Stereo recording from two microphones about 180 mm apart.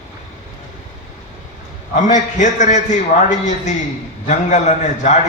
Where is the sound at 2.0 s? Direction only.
45° left (ahead or behind).